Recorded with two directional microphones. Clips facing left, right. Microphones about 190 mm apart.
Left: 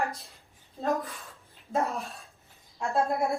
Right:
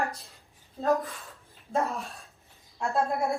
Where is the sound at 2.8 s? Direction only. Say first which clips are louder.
Even; centre (ahead or behind).